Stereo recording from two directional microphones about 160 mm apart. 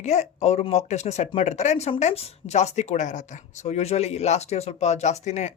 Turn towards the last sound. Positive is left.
turn(degrees=45)  # may be behind; listen again after turning